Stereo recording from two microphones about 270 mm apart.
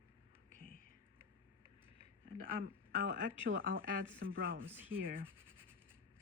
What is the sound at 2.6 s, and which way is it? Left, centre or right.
Speech, right.